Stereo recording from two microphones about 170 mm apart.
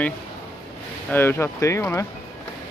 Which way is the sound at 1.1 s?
15° left (ahead or behind).